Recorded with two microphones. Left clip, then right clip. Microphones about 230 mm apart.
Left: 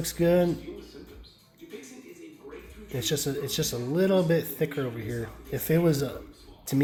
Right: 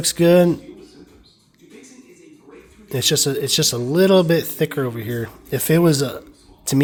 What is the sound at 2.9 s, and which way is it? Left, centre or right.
Speech, right.